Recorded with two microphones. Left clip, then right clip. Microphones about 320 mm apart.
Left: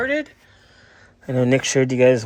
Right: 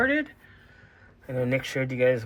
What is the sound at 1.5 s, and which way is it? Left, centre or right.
Speech, left.